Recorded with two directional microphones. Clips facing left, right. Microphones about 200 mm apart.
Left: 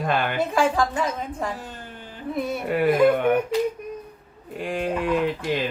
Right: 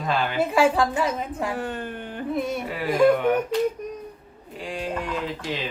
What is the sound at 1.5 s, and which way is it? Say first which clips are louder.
Speech: right 8 dB; 60° right (ahead or behind).